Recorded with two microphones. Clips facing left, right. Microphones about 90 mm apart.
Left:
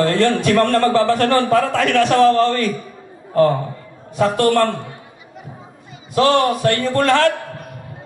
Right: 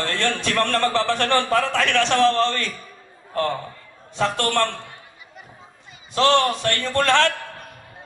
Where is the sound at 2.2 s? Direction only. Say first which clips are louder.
Left 5 dB; 15° left (ahead or behind).